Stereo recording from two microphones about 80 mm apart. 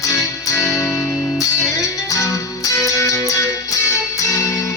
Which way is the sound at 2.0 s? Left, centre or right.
Left.